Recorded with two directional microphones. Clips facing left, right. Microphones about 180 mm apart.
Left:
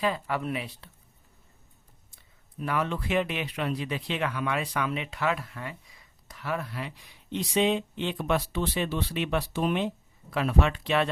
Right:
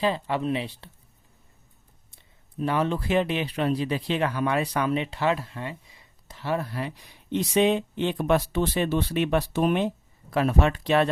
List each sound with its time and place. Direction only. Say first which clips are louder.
0.0 s speech: right 3 dB; 25° right (ahead or behind)
2.6 s speech: right 4 dB; 30° right (ahead or behind)
7.3 s speech: right 4 dB; 50° right (ahead or behind)